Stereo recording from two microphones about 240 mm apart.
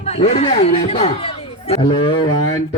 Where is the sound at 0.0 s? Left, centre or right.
Left.